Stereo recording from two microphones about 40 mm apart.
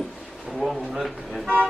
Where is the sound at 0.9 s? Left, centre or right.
Centre.